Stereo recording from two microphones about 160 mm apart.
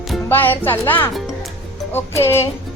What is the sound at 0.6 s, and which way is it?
Speech, 15° left (ahead or behind).